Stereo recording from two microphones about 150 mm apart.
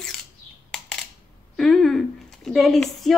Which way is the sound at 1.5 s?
5° left (ahead or behind).